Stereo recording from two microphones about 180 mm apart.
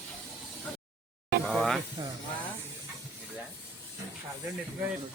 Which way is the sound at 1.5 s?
Centre (ahead or behind).